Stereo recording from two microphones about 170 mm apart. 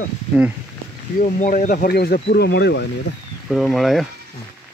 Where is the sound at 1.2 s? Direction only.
50° left (ahead or behind); by 2.9 s 90° left.